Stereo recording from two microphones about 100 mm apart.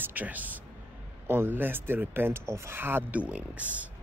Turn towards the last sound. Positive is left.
turn(degrees=-15)  # may be behind; listen again after turning